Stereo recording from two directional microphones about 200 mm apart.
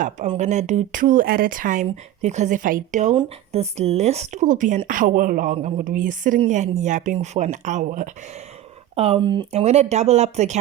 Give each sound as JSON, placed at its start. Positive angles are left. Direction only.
{"t": 0.3, "sound": "speech", "side_deg": -35}